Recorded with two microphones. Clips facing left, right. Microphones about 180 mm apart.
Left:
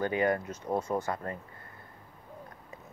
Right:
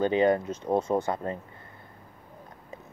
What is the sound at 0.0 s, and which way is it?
Speech, 25° right (ahead or behind).